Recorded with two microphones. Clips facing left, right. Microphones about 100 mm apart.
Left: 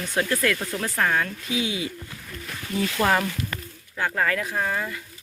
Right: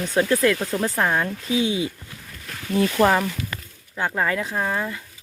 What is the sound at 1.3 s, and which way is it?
Speech, 30° right (ahead or behind).